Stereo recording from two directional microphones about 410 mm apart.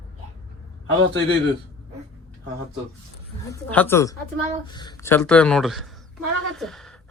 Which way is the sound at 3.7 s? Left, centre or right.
Centre.